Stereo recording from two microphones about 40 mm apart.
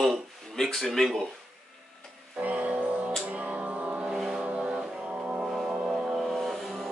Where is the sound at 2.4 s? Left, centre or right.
Right.